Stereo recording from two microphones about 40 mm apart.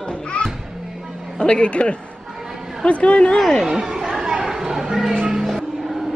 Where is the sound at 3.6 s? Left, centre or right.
Centre.